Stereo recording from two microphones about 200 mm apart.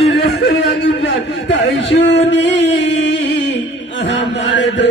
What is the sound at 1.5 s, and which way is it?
Speech, 65° left (ahead or behind).